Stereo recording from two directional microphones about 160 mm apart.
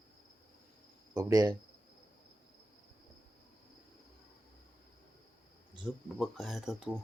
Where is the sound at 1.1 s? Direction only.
20° right (ahead or behind).